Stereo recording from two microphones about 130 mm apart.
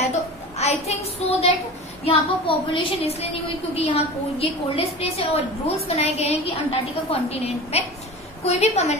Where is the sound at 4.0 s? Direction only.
45° left (ahead or behind).